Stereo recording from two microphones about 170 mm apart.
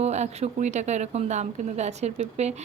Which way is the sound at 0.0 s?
40° right (ahead or behind).